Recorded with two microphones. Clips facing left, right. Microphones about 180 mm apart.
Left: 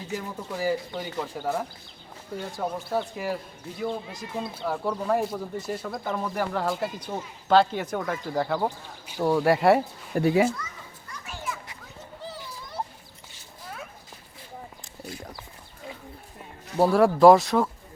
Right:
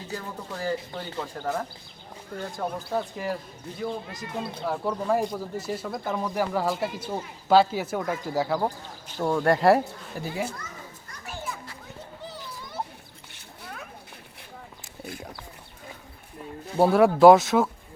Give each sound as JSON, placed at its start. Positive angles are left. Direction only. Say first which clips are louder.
{"t": 0.1, "sound": "speech", "louder": "left 3 dB", "side_deg": 10}
{"t": 10.2, "sound": "speech", "louder": "left 10 dB", "side_deg": 65}
{"t": 16.8, "sound": "speech", "louder": "right 1 dB", "side_deg": 0}